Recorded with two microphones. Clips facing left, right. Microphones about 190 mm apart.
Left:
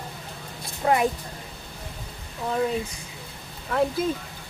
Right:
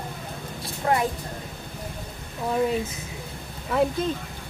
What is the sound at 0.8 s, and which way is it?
Vehicle, 20° left (ahead or behind).